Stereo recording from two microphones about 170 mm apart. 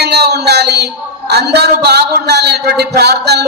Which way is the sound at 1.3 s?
75° right (ahead or behind).